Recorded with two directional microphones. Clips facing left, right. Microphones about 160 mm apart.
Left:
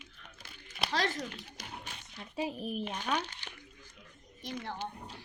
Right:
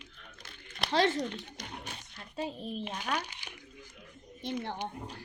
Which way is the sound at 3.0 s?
10° right (ahead or behind).